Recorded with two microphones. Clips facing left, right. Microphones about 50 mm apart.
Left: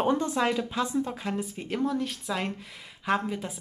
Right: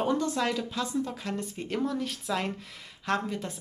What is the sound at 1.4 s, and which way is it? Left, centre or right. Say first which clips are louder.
A woman's voice: left 1 dB; centre.